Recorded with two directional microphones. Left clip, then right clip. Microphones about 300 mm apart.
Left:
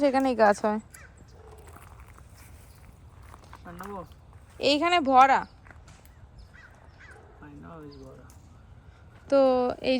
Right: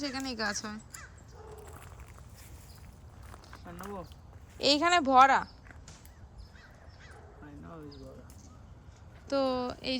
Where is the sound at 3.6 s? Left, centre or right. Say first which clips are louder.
Left 3 dB; centre.